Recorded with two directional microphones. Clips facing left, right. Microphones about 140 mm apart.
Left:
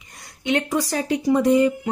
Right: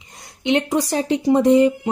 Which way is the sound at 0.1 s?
25° right (ahead or behind).